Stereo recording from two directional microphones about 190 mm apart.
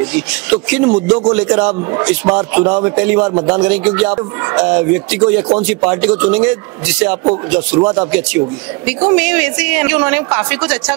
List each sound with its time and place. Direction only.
0.0 s a woman's voice: 5° right (ahead or behind)
1.8 s a woman's voice: 15° right (ahead or behind)
3.3 s a man's voice: 20° right (ahead or behind)
3.5 s a woman's voice: 5° right (ahead or behind)